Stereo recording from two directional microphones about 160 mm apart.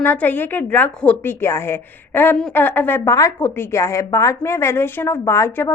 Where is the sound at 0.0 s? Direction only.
10° left (ahead or behind).